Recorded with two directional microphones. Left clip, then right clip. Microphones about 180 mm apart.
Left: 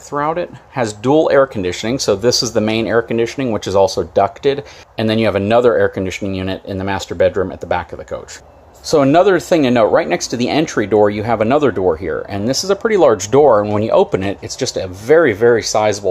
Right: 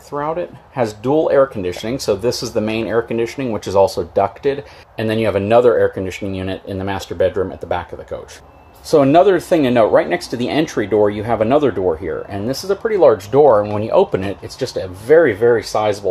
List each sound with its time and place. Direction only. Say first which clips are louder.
0.1 s speech: left 3 dB; 20° left (ahead or behind)
12.8 s speech: even; 35° left (ahead or behind); by 16.0 s 20° left (ahead or behind)